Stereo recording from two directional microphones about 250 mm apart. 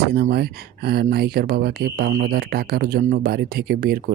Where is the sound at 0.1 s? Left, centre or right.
Right.